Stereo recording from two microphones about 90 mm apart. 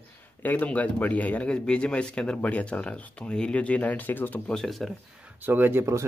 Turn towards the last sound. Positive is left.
turn(degrees=-30)  # may be behind; listen again after turning